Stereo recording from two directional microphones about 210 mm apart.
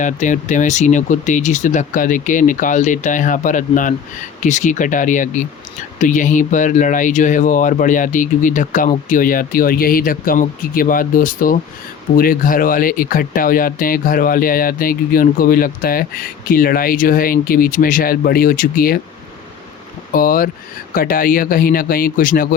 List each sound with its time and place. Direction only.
0.0 s speech: 35° left (ahead or behind)
20.1 s speech: 40° left (ahead or behind)